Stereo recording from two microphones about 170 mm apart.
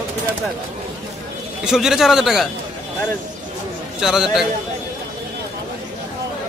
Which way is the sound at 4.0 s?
Centre (ahead or behind).